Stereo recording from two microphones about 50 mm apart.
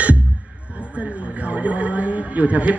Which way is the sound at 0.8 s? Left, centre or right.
Right.